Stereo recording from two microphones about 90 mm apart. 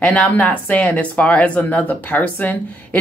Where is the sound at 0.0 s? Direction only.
15° left (ahead or behind).